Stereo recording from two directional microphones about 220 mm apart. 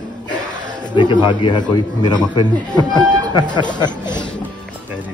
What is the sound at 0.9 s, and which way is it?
A man's voice, 20° left (ahead or behind).